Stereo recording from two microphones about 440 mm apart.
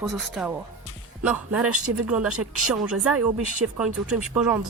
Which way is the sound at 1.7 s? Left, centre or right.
Right.